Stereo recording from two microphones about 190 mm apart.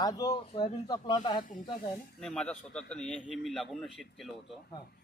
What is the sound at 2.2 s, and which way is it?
A man's voice, 5° left (ahead or behind).